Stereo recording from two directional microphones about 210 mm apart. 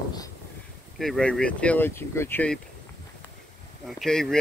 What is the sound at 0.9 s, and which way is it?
Speech, centre (ahead or behind).